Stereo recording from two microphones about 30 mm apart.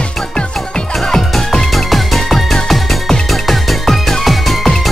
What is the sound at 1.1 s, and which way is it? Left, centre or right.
Music, centre.